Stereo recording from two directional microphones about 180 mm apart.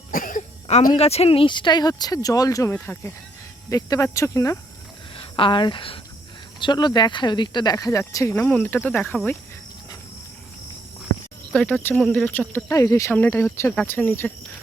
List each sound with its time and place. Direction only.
0.1 s speech: 50° left (ahead or behind); by 4.5 s 15° left (ahead or behind)
5.1 s speech: 30° left (ahead or behind); by 9.3 s 10° left (ahead or behind)
11.5 s speech: 10° left (ahead or behind)